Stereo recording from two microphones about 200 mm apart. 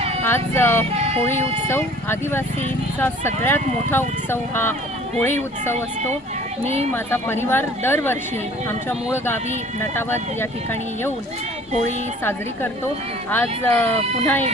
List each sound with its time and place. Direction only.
0.3 s speech: 10° left (ahead or behind)
0.9 s speech: 30° right (ahead or behind)
1.2 s speech: 10° left (ahead or behind)
6.9 s speech: 10° left (ahead or behind)
13.3 s speech: 10° left (ahead or behind)